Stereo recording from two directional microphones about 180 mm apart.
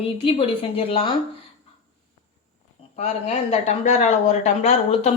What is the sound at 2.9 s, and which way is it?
Speech, 40° left (ahead or behind).